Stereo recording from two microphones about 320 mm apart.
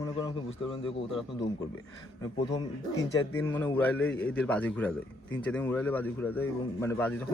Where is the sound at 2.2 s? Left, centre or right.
Centre.